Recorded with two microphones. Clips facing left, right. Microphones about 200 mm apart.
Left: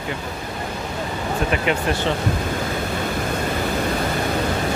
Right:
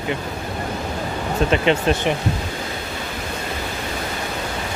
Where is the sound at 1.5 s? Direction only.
25° right (ahead or behind).